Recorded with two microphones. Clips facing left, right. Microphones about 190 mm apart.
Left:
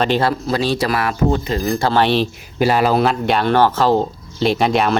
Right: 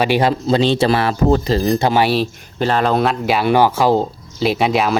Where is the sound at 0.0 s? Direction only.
15° right (ahead or behind); by 1.6 s 30° right (ahead or behind).